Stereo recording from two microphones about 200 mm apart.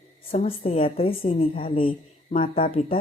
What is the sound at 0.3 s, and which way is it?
A woman's voice, 30° left (ahead or behind).